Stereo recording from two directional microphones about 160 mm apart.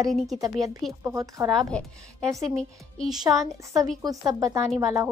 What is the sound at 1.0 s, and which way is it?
Speech, 15° right (ahead or behind).